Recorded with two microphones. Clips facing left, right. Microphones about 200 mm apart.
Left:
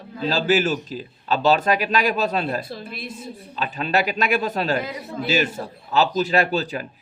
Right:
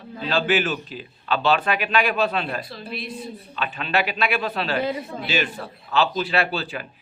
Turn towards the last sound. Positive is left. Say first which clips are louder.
# left 3 dB
turn(degrees=40)  # may be behind; listen again after turning